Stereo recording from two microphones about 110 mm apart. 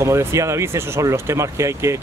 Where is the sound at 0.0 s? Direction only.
25° right (ahead or behind).